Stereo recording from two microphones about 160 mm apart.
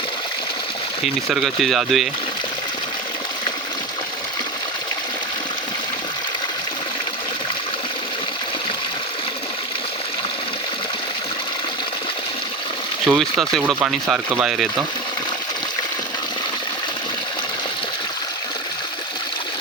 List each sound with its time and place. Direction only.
1.0 s speech: centre (ahead or behind)
13.1 s speech: 20° right (ahead or behind)
13.8 s speech: 5° right (ahead or behind)